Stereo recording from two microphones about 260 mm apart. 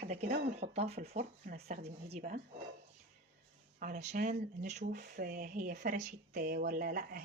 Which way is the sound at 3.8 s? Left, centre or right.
Right.